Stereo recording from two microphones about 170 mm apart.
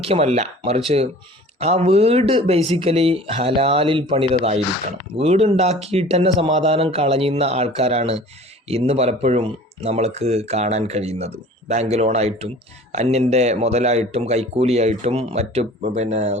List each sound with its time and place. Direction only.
0.0 s speech: 35° right (ahead or behind)